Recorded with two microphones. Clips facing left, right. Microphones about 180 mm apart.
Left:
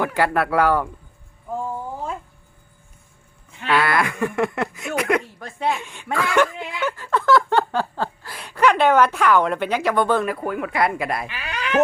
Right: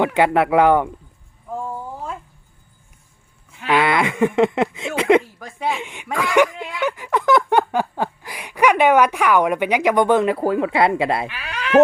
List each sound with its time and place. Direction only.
0.0 s speech: 20° right (ahead or behind)
1.5 s a sound: centre (ahead or behind)
3.7 s speech: 20° right (ahead or behind)
5.4 s speech: 5° right (ahead or behind)
6.8 s a sound: 15° right (ahead or behind)
10.3 s speech: 30° right (ahead or behind)
11.3 s cat: centre (ahead or behind)